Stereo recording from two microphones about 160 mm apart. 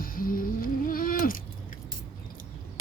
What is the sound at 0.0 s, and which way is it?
Mechanisms, 65° left (ahead or behind).